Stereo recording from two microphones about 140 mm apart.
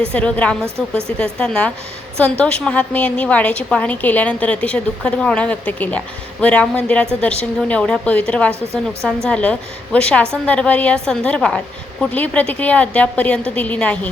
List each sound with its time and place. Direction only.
0.1 s a woman's voice: 10° left (ahead or behind)
8.7 s a woman's voice: 20° right (ahead or behind)
9.0 s a woman's voice: 5° left (ahead or behind)